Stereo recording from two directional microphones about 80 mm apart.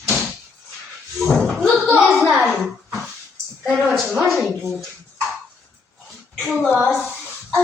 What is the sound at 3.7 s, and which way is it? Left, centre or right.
Speech, centre.